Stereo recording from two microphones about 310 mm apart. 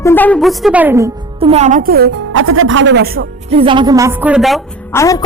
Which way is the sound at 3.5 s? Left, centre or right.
Centre.